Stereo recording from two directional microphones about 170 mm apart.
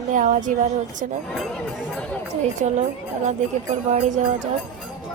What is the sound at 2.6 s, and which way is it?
Speech, 40° right (ahead or behind).